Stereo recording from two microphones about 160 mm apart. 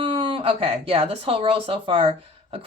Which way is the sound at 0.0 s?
30° right (ahead or behind).